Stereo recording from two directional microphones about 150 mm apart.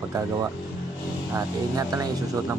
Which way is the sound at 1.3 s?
20° right (ahead or behind).